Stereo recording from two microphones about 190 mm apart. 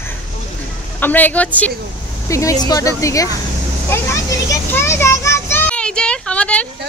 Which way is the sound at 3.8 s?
15° left (ahead or behind).